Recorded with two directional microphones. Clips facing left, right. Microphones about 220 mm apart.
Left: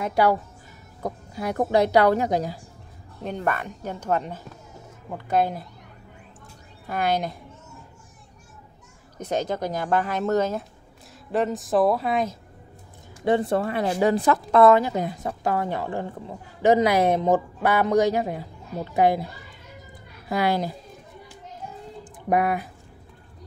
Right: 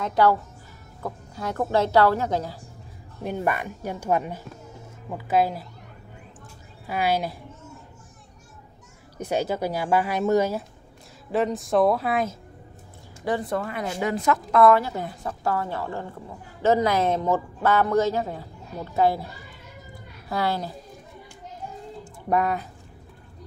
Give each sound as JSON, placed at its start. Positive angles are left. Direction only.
{"t": 0.0, "sound": "a woman's voice", "side_deg": 10}
{"t": 3.3, "sound": "speech", "side_deg": -10}
{"t": 6.9, "sound": "speech", "side_deg": -5}
{"t": 9.2, "sound": "speech", "side_deg": -10}
{"t": 11.3, "sound": "speech", "side_deg": 0}
{"t": 13.2, "sound": "a woman's voice", "side_deg": 25}
{"t": 20.2, "sound": "a woman's voice", "side_deg": 15}
{"t": 22.0, "sound": "music", "side_deg": 10}